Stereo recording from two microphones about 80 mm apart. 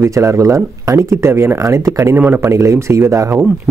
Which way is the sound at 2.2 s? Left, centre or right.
Right.